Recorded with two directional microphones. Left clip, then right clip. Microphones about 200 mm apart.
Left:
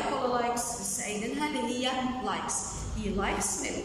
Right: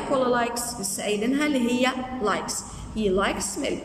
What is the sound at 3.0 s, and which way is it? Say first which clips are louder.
Speech: right 7 dB; 60° right (ahead or behind).